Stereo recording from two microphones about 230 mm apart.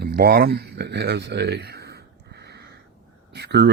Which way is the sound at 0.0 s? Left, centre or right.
Right.